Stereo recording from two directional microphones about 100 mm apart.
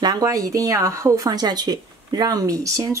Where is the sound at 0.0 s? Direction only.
40° right (ahead or behind).